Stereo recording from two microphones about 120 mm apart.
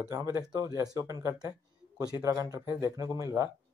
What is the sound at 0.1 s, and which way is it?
Speech, 25° right (ahead or behind).